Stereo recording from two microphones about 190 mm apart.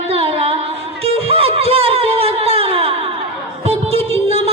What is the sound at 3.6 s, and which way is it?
Music, 30° right (ahead or behind).